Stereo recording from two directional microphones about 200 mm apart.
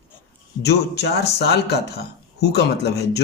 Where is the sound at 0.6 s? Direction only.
55° left (ahead or behind).